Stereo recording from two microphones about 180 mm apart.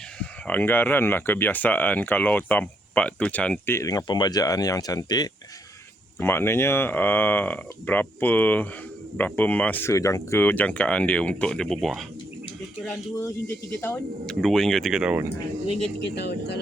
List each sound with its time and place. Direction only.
0.2 s speech: 10° left (ahead or behind)
13.1 s speech: 15° left (ahead or behind)
14.3 s speech: centre (ahead or behind)
16.1 s speech: 65° left (ahead or behind)